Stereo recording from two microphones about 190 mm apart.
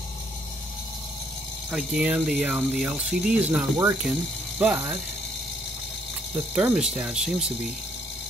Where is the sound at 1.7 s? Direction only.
5° right (ahead or behind).